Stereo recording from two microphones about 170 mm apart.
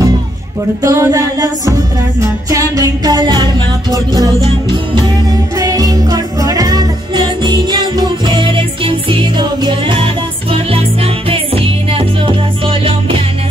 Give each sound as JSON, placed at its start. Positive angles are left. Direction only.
{"t": 0.8, "sound": "music", "side_deg": -20}
{"t": 11.2, "sound": "music", "side_deg": -35}